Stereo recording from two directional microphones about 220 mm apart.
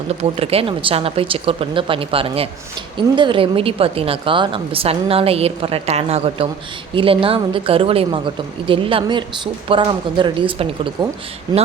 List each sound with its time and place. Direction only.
0.1 s a woman's voice: 25° right (ahead or behind)